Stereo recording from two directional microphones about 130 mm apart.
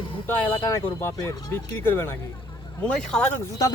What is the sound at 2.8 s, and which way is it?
Speech, 5° left (ahead or behind).